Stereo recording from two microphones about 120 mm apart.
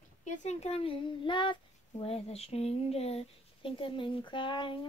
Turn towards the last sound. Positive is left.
turn(degrees=45)  # may be behind; listen again after turning